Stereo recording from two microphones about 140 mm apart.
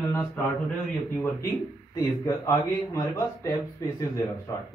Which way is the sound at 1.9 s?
25° left (ahead or behind).